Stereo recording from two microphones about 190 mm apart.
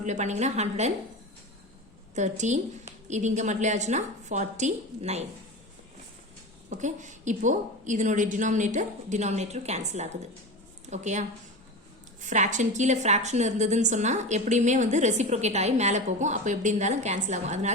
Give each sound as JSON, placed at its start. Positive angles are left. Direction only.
{"t": 0.0, "sound": "a woman's voice", "side_deg": -40}
{"t": 2.1, "sound": "a woman's voice", "side_deg": -40}
{"t": 6.7, "sound": "a woman's voice", "side_deg": -40}